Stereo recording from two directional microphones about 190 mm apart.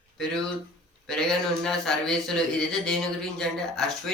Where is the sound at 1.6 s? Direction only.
5° left (ahead or behind).